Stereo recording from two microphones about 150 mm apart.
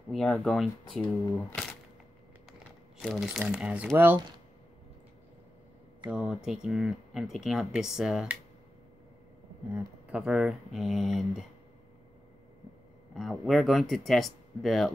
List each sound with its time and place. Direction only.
0.1 s speech: centre (ahead or behind)
3.0 s speech: centre (ahead or behind)
6.0 s speech: 5° right (ahead or behind)
9.8 s speech: 5° right (ahead or behind)
13.1 s speech: centre (ahead or behind)